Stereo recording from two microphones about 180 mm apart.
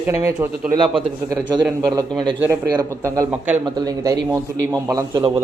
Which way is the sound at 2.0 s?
25° right (ahead or behind).